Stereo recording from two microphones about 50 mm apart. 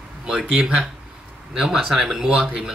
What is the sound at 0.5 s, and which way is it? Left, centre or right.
Speech, right.